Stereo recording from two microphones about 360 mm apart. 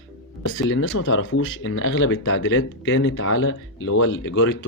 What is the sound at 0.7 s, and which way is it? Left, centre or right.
Speech, left.